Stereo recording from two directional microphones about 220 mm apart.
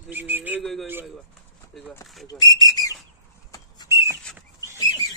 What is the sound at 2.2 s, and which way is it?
Whistle, 15° left (ahead or behind).